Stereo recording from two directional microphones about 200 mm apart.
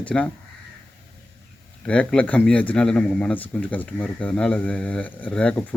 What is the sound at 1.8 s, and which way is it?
A man's voice, 5° left (ahead or behind).